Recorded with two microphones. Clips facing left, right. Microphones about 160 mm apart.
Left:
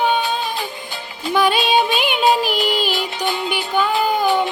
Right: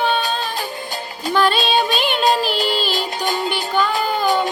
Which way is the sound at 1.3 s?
15° left (ahead or behind).